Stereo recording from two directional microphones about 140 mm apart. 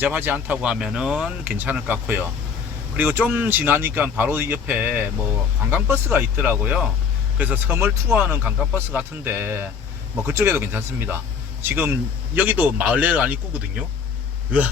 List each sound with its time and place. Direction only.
0.0 s speech: 15° right (ahead or behind)